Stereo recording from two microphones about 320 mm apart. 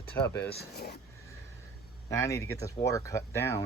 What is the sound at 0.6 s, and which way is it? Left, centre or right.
Speech, left.